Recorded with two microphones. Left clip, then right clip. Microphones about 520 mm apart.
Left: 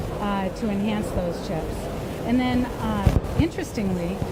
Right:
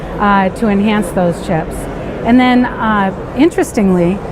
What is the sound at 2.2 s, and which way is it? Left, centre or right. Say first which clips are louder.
A woman's voice: right 14 dB; right.